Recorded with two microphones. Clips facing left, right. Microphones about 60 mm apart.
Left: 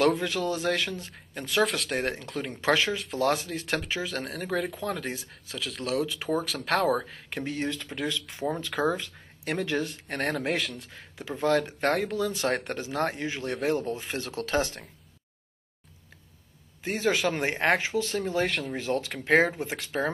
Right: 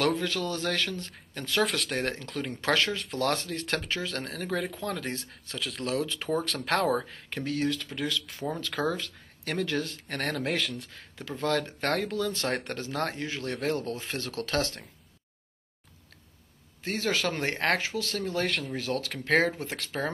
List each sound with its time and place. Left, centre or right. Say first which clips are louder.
0.2 s speech: left 2 dB; centre
7.3 s speech: right 2 dB; left
16.8 s speech: left 3 dB; centre
18.5 s speech: left 1 dB; centre
18.8 s speech: left 2 dB; left